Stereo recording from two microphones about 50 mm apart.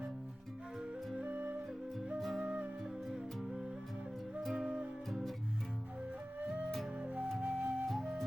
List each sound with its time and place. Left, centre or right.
1.2 s music: right
2.1 s music: centre
2.4 s music: right
3.1 s music: centre
5.0 s music: centre
6.4 s music: right
7.0 s flute: centre
7.9 s flute: centre